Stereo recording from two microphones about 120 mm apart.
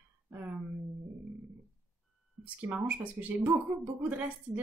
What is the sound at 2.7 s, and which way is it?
Speech, 10° right (ahead or behind).